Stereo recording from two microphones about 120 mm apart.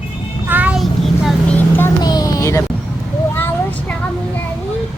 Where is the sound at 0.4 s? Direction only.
15° right (ahead or behind).